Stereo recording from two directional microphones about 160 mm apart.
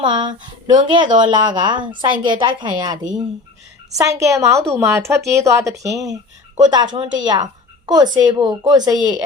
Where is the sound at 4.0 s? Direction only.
20° right (ahead or behind).